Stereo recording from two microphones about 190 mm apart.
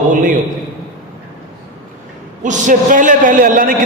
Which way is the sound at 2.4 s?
40° right (ahead or behind).